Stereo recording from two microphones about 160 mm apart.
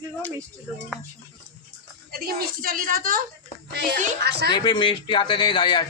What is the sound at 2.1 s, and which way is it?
A woman's voice, 70° right (ahead or behind).